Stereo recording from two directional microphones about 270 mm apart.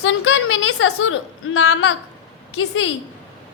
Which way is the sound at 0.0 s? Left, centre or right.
Left.